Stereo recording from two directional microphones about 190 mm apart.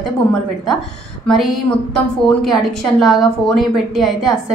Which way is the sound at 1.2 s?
Centre (ahead or behind).